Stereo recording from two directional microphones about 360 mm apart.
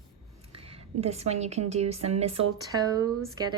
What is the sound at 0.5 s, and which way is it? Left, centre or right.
A woman's voice, centre.